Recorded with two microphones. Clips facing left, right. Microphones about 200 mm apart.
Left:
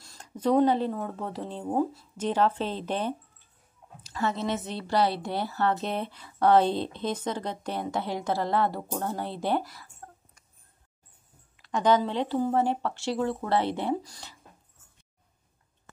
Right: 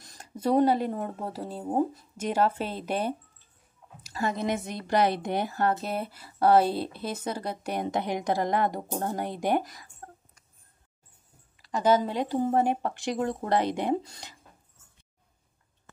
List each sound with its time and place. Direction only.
0.2 s a woman's voice: 10° right (ahead or behind)
5.5 s speech: 45° right (ahead or behind)
5.8 s speech: 5° right (ahead or behind)
11.6 s speech: 5° right (ahead or behind); by 14.3 s 20° right (ahead or behind)